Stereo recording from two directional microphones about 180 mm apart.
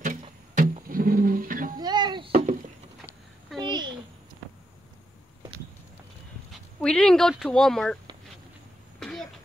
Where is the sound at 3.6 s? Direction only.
25° right (ahead or behind).